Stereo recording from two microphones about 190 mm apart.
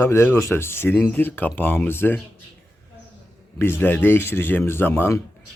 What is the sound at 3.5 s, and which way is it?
Speech, 10° left (ahead or behind).